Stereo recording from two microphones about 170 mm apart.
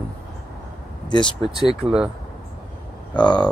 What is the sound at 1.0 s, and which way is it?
Speech, 25° left (ahead or behind).